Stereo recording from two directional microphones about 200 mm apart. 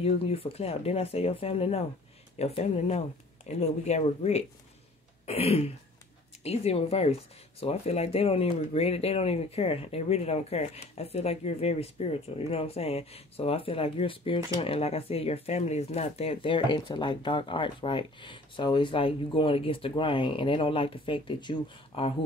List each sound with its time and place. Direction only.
0.0 s speech: 30° left (ahead or behind)